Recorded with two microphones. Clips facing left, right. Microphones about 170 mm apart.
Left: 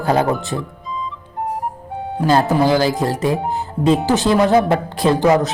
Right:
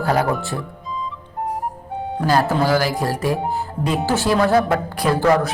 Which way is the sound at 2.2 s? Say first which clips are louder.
Left 3 dB; 20° left (ahead or behind).